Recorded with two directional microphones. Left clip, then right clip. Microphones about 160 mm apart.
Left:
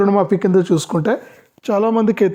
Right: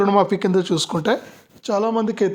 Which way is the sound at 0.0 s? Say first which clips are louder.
Left 2 dB; 40° left (ahead or behind).